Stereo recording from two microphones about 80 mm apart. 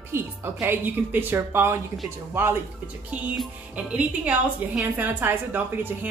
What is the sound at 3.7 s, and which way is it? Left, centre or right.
A woman's voice, centre.